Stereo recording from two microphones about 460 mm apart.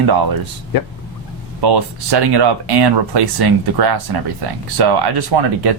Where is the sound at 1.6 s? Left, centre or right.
Right.